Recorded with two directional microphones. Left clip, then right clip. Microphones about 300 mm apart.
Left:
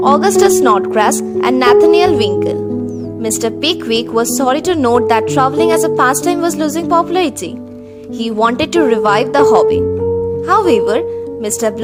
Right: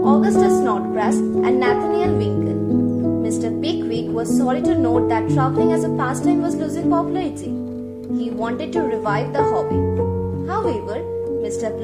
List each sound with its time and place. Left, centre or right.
0.0 s a woman's voice: left
3.2 s a woman's voice: left
8.4 s a woman's voice: left